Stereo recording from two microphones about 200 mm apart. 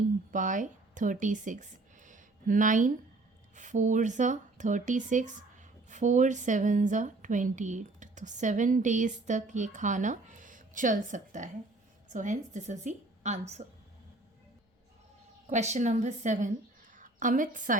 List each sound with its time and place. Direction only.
0.3 s speech: 40° right (ahead or behind)
15.4 s a woman's voice: 35° right (ahead or behind)